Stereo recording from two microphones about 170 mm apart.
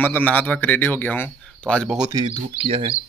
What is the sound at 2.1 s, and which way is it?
Speech, 30° right (ahead or behind).